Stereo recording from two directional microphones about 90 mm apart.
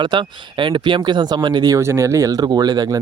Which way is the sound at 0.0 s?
60° right (ahead or behind).